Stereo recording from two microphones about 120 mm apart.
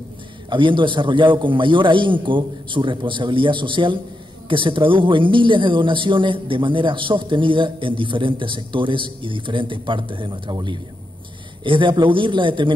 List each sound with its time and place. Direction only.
0.5 s a man's voice: 45° right (ahead or behind)